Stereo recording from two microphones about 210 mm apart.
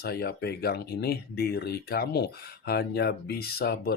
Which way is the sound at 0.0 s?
50° left (ahead or behind).